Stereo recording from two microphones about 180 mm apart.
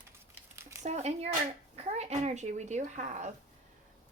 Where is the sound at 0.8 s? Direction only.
40° right (ahead or behind).